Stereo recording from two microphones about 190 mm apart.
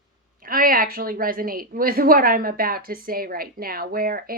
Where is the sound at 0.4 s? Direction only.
50° right (ahead or behind).